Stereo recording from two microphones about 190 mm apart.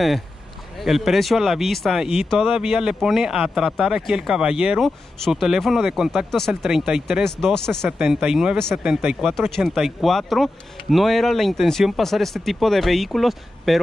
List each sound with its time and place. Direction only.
0.7 s speech: centre (ahead or behind)